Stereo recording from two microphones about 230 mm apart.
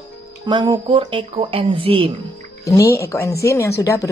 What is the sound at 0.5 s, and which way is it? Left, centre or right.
Speech, centre.